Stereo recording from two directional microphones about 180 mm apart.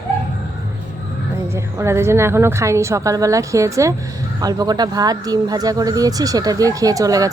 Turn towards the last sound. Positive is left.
turn(degrees=-20)  # may be behind; listen again after turning